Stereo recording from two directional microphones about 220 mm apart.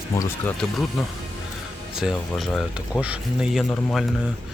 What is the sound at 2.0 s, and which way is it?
Speech, centre (ahead or behind).